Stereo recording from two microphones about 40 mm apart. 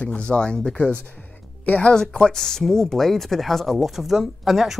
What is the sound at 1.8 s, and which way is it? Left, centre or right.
Speech, left.